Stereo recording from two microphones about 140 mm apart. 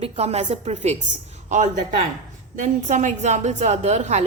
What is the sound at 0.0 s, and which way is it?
A woman's voice, 50° right (ahead or behind).